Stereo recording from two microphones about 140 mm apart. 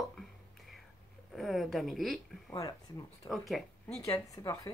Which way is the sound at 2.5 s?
30° left (ahead or behind).